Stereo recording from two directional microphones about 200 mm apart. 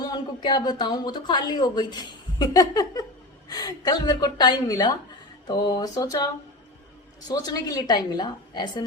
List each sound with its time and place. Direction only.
0.0 s a woman's voice: 20° left (ahead or behind)
7.3 s a woman's voice: 20° left (ahead or behind)